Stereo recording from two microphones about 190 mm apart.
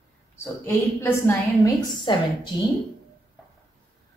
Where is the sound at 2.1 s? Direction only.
25° left (ahead or behind).